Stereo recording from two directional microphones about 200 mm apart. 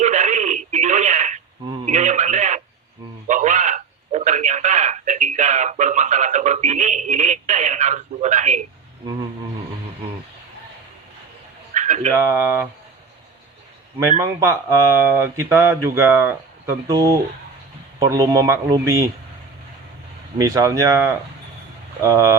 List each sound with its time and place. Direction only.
0.0 s telephone: 35° right (ahead or behind)
3.2 s a man's voice: 40° right (ahead or behind)
11.7 s dog: 35° right (ahead or behind)
12.3 s speech: 10° right (ahead or behind)
14.2 s speech: 15° right (ahead or behind)
20.4 s speech: 15° right (ahead or behind)